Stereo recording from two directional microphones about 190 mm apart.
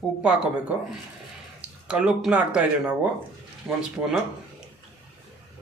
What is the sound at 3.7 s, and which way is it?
Speech, centre (ahead or behind).